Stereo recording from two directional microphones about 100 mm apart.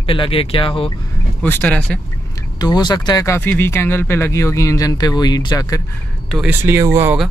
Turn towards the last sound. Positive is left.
turn(degrees=-30)  # may be behind; listen again after turning